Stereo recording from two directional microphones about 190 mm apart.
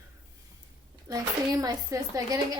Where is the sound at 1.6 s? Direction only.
20° right (ahead or behind).